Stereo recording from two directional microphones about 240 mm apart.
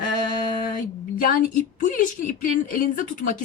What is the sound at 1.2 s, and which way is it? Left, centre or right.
A woman's voice, left.